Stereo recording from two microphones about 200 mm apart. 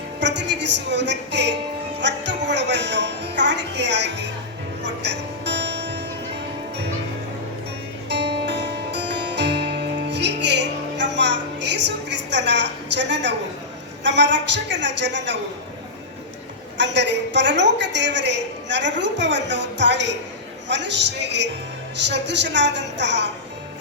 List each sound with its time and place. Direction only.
0.2 s a woman's voice: 60° right (ahead or behind)
4.8 s music: 60° right (ahead or behind)
8.1 s music: 60° right (ahead or behind)
14.0 s a woman's voice: 60° right (ahead or behind)
16.7 s a woman's voice: 60° right (ahead or behind)